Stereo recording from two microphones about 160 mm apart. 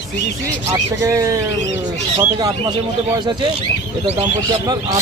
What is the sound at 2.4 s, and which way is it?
Speech, 25° right (ahead or behind).